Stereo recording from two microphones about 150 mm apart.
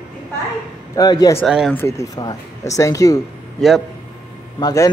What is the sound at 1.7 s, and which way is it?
Speech, 15° left (ahead or behind).